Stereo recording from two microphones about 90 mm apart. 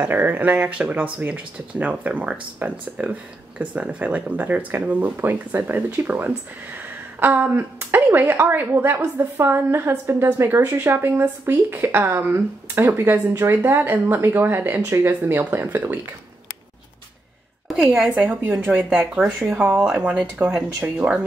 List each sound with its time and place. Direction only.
0.0 s speech: 20° right (ahead or behind)
18.1 s speech: 20° right (ahead or behind)